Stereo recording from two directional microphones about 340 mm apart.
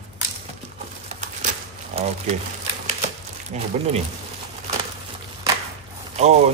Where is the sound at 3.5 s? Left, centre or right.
Centre.